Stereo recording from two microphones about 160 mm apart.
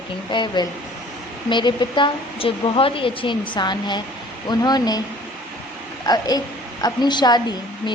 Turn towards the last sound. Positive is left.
turn(degrees=25)  # may be behind; listen again after turning